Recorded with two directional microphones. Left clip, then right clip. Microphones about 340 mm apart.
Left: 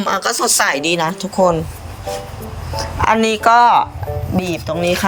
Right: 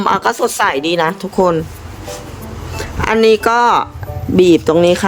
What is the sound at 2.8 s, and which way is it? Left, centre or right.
A woman's voice, centre.